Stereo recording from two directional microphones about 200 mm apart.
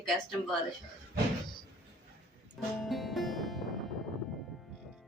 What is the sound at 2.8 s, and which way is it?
Music, centre (ahead or behind).